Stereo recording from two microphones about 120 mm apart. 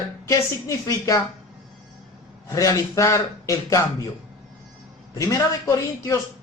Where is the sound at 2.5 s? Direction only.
25° left (ahead or behind).